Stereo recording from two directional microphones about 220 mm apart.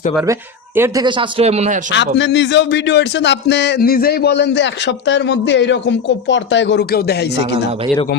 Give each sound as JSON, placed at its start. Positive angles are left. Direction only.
{"t": 0.8, "sound": "speech", "side_deg": -20}
{"t": 1.9, "sound": "speech", "side_deg": 55}